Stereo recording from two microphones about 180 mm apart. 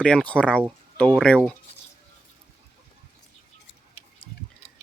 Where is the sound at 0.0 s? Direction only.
5° left (ahead or behind).